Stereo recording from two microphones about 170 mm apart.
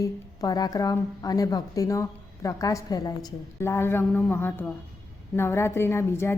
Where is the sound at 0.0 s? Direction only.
20° left (ahead or behind).